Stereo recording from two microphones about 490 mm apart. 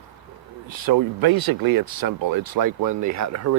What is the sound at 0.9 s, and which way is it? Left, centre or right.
Speech, right.